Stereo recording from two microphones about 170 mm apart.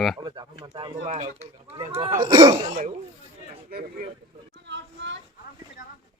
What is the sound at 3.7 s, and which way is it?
Speech, 65° right (ahead or behind).